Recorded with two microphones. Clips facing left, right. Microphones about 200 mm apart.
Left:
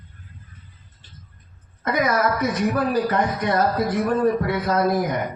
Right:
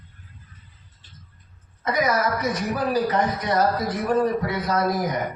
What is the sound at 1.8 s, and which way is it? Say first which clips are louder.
Speech: left 2 dB; 55° left (ahead or behind).